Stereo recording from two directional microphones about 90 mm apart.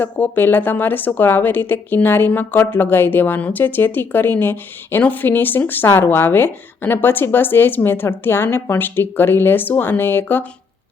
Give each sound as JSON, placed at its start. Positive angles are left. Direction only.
{"t": 0.0, "sound": "a woman's voice", "side_deg": 25}